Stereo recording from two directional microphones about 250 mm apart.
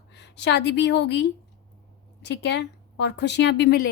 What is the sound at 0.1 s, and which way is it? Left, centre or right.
A woman's voice, left.